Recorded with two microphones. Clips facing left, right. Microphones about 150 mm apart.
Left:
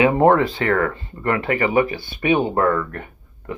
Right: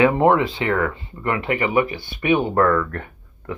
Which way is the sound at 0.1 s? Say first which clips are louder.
Left 2 dB; 45° left (ahead or behind).